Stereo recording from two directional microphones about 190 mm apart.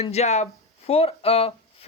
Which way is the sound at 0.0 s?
35° left (ahead or behind).